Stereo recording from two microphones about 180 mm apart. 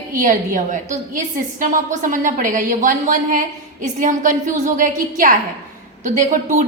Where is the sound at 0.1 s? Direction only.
45° right (ahead or behind).